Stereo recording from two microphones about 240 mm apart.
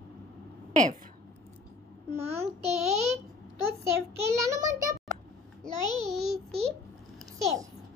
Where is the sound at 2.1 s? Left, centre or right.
Centre.